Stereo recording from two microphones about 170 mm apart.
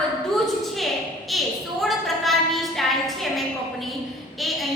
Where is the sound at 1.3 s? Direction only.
Centre (ahead or behind).